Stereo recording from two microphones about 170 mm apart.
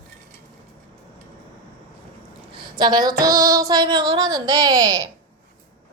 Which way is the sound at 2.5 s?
25° right (ahead or behind).